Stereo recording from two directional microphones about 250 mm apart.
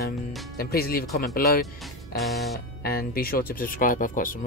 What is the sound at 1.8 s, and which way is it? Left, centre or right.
Speech, centre.